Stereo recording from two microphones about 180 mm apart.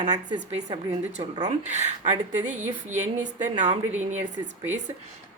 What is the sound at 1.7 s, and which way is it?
Speech, 40° right (ahead or behind).